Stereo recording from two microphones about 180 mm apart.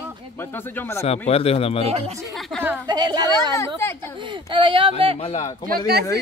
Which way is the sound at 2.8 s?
25° right (ahead or behind).